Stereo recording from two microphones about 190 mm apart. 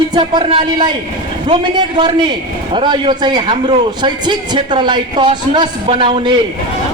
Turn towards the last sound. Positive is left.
turn(degrees=-25)  # may be behind; listen again after turning